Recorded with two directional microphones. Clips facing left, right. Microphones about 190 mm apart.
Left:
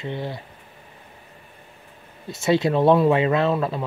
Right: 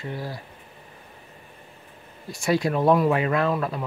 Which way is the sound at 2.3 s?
25° left (ahead or behind).